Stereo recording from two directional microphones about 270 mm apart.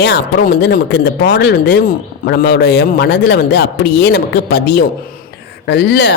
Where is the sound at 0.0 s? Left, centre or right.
Left.